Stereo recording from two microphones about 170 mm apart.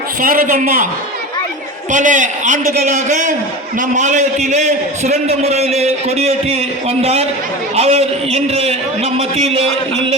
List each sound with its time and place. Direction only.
0.2 s a man's voice: 55° right (ahead or behind)
1.9 s a man's voice: 45° right (ahead or behind)